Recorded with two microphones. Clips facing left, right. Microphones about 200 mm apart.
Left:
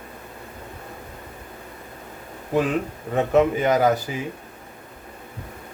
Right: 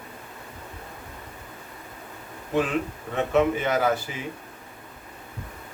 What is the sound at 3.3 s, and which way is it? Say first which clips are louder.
Speech: left 3 dB; 40° left (ahead or behind).